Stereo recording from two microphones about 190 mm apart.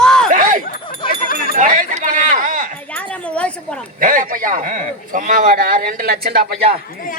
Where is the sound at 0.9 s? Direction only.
50° left (ahead or behind).